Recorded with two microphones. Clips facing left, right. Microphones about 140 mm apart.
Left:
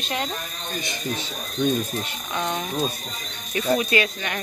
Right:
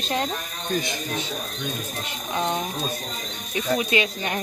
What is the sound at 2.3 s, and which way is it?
Speech, 25° right (ahead or behind).